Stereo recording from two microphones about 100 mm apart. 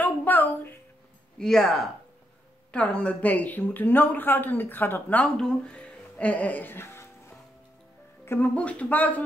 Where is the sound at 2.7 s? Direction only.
10° left (ahead or behind).